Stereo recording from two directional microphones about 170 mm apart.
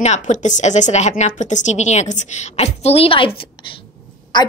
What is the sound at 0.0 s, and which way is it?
A woman's voice, 45° left (ahead or behind).